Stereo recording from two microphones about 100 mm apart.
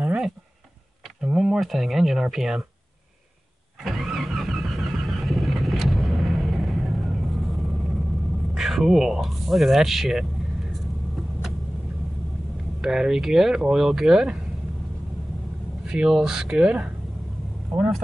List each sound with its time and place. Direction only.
1.2 s speech: 5° right (ahead or behind)
3.8 s vehicle: centre (ahead or behind)
8.5 s a sound: 5° right (ahead or behind)
12.8 s speech: centre (ahead or behind)
15.9 s speech: 5° right (ahead or behind)